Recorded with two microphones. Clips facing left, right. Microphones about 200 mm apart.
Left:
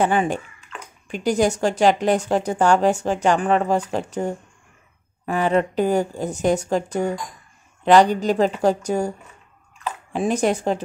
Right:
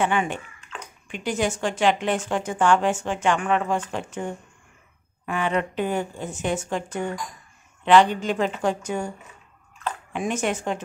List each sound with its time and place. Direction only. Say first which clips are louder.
0.0 s speech: left 4 dB; 35° left (ahead or behind)
10.1 s speech: left 6 dB; 35° left (ahead or behind)